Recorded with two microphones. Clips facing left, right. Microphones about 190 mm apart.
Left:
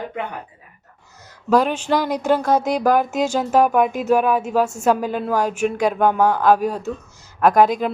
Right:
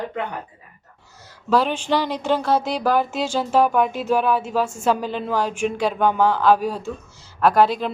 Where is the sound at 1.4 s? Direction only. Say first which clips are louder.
Left 2 dB; 10° left (ahead or behind).